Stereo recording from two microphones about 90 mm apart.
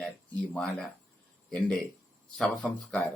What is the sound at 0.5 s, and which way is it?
Speech, 10° left (ahead or behind).